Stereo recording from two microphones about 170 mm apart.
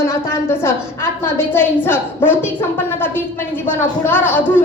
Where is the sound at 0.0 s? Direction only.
15° left (ahead or behind).